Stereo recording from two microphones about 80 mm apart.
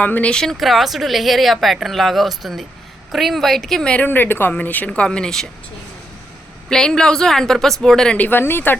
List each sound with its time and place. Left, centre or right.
0.0 s speech: centre
3.9 s a woman's voice: left
6.7 s speech: centre; by 8.8 s left